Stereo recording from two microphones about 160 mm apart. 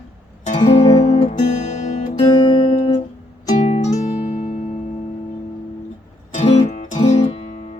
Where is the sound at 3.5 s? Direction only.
45° left (ahead or behind).